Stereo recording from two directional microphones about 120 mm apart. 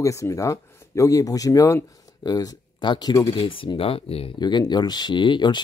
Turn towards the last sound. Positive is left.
turn(degrees=40)  # may be behind; listen again after turning